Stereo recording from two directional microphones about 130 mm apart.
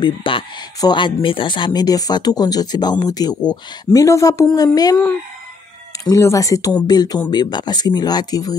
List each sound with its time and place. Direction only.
0.0 s speech: 40° left (ahead or behind)
6.0 s speech: 25° left (ahead or behind)